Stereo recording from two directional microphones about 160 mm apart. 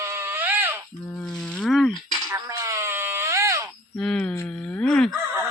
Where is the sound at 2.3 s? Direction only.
20° right (ahead or behind).